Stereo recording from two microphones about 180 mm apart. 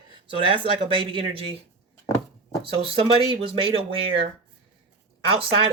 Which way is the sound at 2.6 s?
30° right (ahead or behind).